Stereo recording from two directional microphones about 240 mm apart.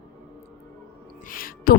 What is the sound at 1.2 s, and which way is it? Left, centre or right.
Music, left.